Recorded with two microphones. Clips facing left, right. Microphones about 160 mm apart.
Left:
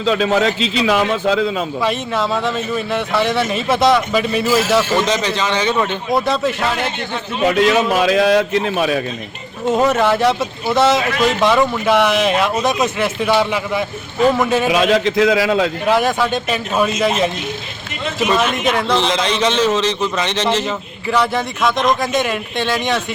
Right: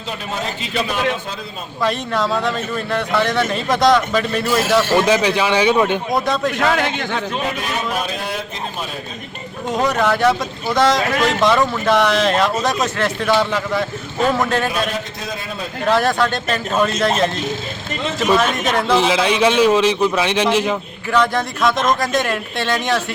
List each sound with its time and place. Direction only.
0.0 s a man's voice: 90° left
1.8 s speech: 5° left (ahead or behind)
4.9 s a man's voice: 10° right (ahead or behind)
6.1 s speech: 5° left (ahead or behind)
7.4 s a man's voice: 90° left
9.7 s speech: 5° left (ahead or behind)
14.7 s a man's voice: 90° left
15.9 s speech: 5° left (ahead or behind)
18.3 s a man's voice: centre (ahead or behind)
21.1 s speech: 5° left (ahead or behind)